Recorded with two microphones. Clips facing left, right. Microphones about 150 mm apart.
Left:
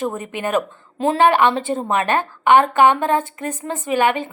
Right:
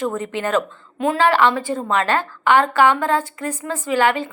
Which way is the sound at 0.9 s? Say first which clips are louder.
Left 2 dB; 30° left (ahead or behind).